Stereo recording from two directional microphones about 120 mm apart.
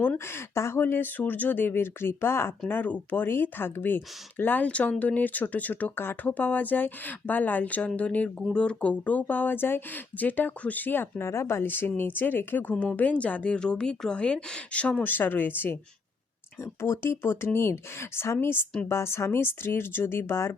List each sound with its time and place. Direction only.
0.0 s speech: 20° left (ahead or behind)